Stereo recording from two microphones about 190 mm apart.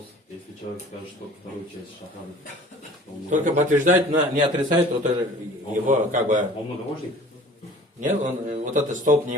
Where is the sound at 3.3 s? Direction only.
40° right (ahead or behind).